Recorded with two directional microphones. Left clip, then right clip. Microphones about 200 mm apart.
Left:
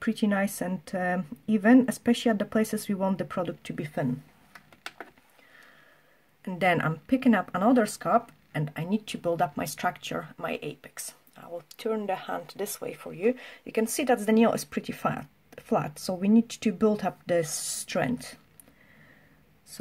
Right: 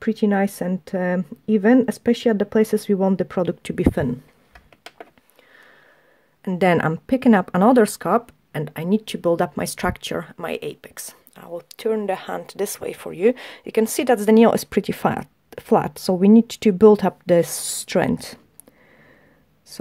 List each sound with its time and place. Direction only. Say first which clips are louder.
0.0 s speech: right 7 dB; 30° right (ahead or behind); by 4.1 s 45° right (ahead or behind)
6.4 s speech: right 7 dB; 40° right (ahead or behind)